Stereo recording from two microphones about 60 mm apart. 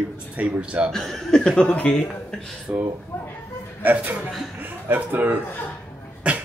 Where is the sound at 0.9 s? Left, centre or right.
Centre.